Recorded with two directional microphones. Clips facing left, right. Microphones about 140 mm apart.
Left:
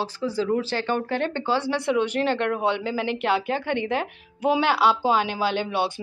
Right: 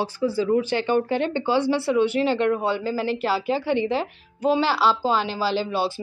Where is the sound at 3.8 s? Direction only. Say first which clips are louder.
Right 2 dB; 60° left (ahead or behind).